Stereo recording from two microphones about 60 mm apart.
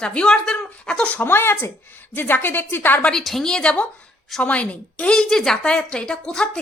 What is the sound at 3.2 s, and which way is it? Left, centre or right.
A woman's voice, centre.